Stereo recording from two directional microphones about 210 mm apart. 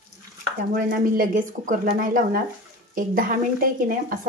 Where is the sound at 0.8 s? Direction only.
40° right (ahead or behind).